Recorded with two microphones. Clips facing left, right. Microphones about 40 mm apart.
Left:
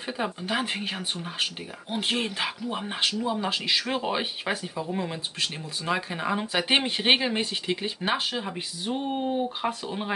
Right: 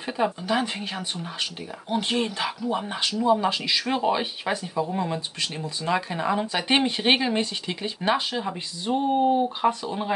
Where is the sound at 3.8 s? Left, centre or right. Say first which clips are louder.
Right 4 dB; centre.